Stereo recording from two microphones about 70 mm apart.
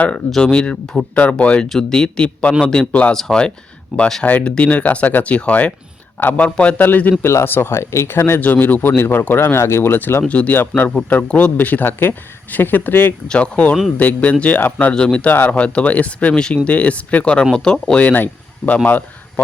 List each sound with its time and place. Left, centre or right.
0.1 s speech: centre
4.2 s a man's voice: left
10.2 s a man's voice: centre
10.9 s a man's voice: centre
13.2 s a man's voice: centre